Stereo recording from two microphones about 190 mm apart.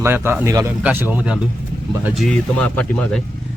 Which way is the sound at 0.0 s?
10° right (ahead or behind).